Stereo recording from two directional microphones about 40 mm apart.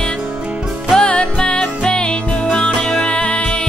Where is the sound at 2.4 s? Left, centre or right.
Centre.